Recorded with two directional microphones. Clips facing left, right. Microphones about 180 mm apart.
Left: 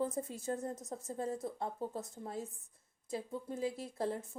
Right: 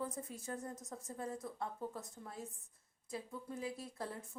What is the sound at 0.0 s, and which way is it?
Speech, 25° left (ahead or behind).